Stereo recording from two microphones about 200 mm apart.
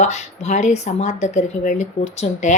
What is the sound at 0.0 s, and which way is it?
A woman's voice, 35° left (ahead or behind).